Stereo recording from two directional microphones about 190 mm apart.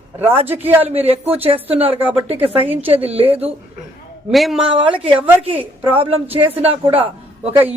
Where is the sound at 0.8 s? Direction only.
30° right (ahead or behind).